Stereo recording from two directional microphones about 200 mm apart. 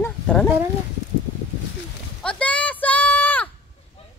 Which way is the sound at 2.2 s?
5° left (ahead or behind).